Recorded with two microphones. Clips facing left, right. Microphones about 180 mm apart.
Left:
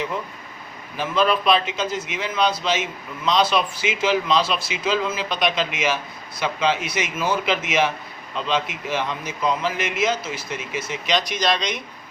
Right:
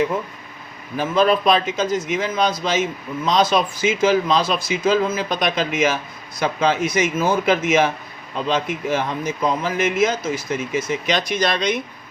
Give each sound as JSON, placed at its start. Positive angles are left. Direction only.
{"t": 0.9, "sound": "a man's voice", "side_deg": -45}